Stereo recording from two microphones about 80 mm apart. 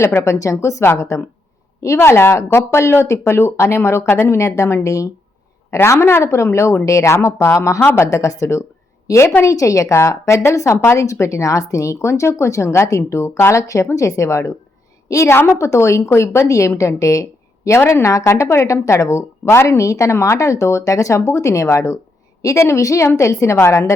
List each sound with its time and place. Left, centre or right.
0.0 s a woman's voice: left